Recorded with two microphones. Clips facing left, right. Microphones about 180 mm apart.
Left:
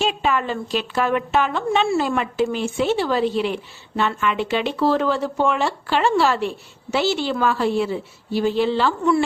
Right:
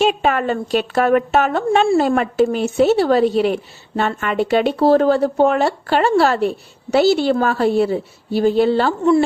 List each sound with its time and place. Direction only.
0.0 s a woman's voice: 50° right (ahead or behind)